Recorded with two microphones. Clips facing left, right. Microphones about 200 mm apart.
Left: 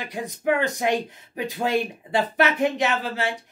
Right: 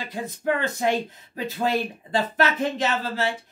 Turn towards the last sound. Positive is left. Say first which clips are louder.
# left 1 dB
turn(degrees=15)  # may be behind; listen again after turning